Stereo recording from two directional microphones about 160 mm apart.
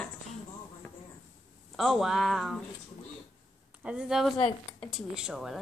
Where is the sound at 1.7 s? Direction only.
Centre (ahead or behind).